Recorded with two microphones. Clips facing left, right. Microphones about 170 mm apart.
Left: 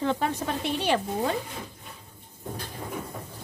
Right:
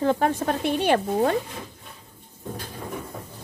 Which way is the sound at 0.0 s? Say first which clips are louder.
Right 5 dB; 45° right (ahead or behind).